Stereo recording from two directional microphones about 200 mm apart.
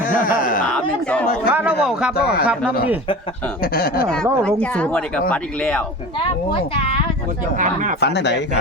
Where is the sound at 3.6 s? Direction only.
50° left (ahead or behind).